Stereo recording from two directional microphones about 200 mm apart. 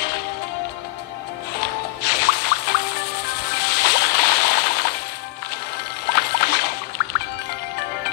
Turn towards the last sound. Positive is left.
turn(degrees=55)  # may be behind; listen again after turning